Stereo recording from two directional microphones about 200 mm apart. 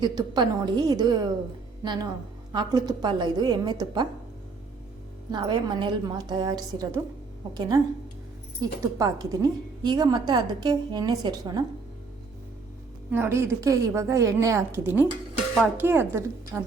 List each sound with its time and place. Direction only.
0.0 s a woman's voice: 20° right (ahead or behind)
5.3 s a woman's voice: 20° right (ahead or behind)
13.1 s a woman's voice: 10° right (ahead or behind)